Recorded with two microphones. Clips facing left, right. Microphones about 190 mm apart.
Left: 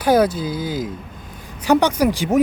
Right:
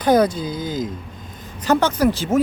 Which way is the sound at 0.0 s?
5° left (ahead or behind).